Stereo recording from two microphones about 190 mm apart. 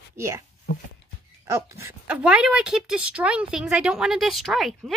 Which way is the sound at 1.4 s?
15° right (ahead or behind).